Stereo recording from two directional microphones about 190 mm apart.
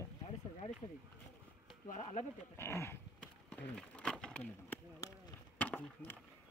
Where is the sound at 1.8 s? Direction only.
40° left (ahead or behind).